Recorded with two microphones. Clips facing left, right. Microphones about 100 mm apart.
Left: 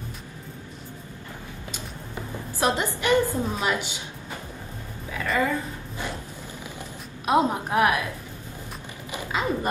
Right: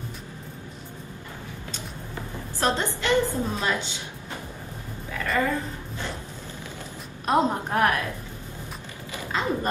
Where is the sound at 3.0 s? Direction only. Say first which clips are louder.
Left 2 dB; 10° left (ahead or behind).